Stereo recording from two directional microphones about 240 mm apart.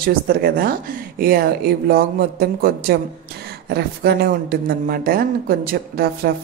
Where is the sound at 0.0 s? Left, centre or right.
Right.